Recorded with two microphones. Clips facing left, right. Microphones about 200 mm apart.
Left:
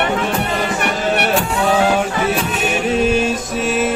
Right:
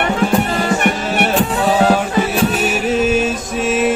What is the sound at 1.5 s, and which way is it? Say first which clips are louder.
Music: right 1 dB; 35° right (ahead or behind).